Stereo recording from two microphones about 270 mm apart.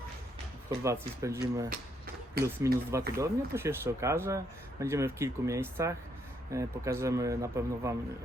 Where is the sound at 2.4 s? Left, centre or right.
Right.